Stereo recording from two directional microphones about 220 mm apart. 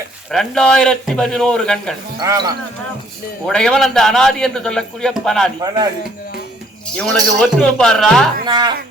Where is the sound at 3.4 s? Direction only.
5° left (ahead or behind).